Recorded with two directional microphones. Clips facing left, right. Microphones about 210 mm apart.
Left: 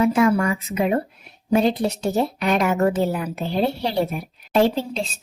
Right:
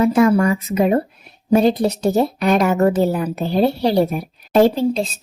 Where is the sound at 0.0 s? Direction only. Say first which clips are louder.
Right 4 dB; 40° right (ahead or behind).